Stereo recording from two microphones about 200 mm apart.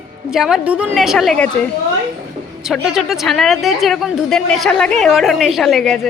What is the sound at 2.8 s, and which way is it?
Speech, centre (ahead or behind).